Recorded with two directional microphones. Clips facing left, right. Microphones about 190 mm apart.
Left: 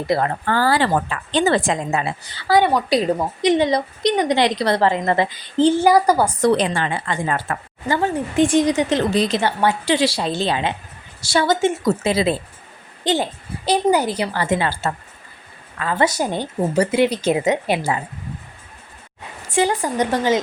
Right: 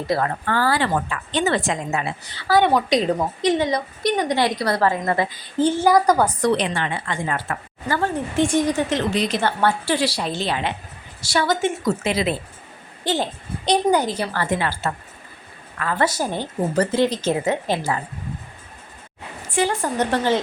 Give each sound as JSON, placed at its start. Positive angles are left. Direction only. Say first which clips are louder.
{"t": 0.1, "sound": "a woman's voice", "louder": "left 2 dB", "side_deg": 15}
{"t": 0.4, "sound": "a woman's voice", "louder": "left 4 dB", "side_deg": 30}
{"t": 2.5, "sound": "a woman's voice", "louder": "left 1 dB", "side_deg": 10}
{"t": 3.6, "sound": "a woman's voice", "louder": "left 4 dB", "side_deg": 25}
{"t": 5.8, "sound": "a woman's voice", "louder": "left 1 dB", "side_deg": 10}
{"t": 6.4, "sound": "a woman's voice", "louder": "left 3 dB", "side_deg": 35}
{"t": 7.9, "sound": "a woman's voice", "louder": "left 2 dB", "side_deg": 15}
{"t": 9.0, "sound": "a woman's voice", "louder": "left 3 dB", "side_deg": 35}
{"t": 9.4, "sound": "a woman's voice", "louder": "left 1 dB", "side_deg": 10}
{"t": 13.0, "sound": "a woman's voice", "louder": "left 3 dB", "side_deg": 20}
{"t": 13.7, "sound": "a woman's voice", "louder": "left 1 dB", "side_deg": 10}
{"t": 19.5, "sound": "a woman's voice", "louder": "left 2 dB", "side_deg": 15}